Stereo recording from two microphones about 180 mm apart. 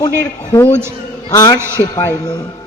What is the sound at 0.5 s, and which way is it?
A woman's voice, 15° left (ahead or behind).